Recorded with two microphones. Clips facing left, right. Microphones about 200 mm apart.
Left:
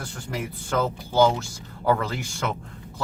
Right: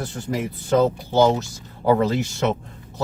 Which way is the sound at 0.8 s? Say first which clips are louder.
Right 4 dB; 20° right (ahead or behind).